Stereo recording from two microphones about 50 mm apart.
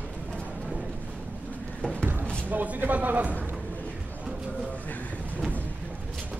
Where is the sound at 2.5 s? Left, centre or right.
Right.